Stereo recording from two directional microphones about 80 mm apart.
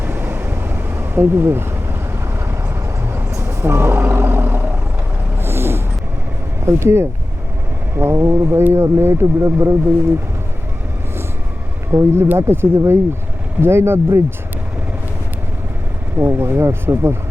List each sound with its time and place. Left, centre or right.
0.0 s a sound: right
3.1 s vehicle: right
5.4 s a sound: right
6.7 s speech: right
11.9 s speech: right
16.1 s speech: right